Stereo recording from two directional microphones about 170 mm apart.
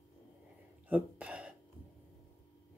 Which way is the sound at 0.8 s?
10° right (ahead or behind).